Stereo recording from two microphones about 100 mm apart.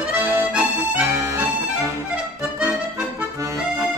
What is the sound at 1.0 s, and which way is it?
Music, 30° right (ahead or behind).